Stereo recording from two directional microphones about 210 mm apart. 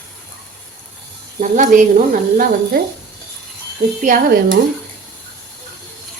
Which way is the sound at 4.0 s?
40° right (ahead or behind).